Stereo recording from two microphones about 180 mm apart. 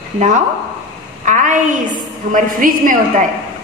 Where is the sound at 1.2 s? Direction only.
45° right (ahead or behind).